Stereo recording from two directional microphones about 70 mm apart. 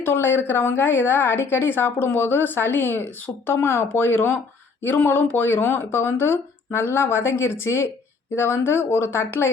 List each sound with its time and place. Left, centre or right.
0.0 s speech: left